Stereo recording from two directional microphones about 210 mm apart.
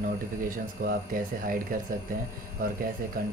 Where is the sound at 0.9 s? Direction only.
40° right (ahead or behind).